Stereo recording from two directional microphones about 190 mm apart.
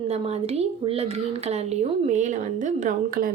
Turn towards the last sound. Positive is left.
turn(degrees=-45)  # may be behind; listen again after turning